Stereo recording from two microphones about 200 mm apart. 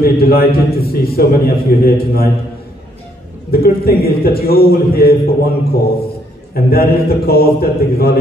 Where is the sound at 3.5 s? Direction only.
50° left (ahead or behind).